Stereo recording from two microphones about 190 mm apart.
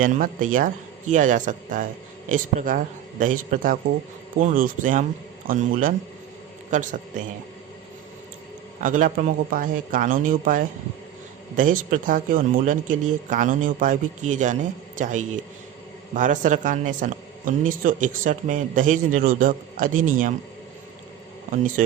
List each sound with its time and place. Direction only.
0.0 s a man's voice: 45° right (ahead or behind)
8.8 s a man's voice: 45° right (ahead or behind)